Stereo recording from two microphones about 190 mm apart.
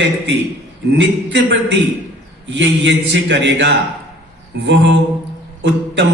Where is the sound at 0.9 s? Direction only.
65° right (ahead or behind).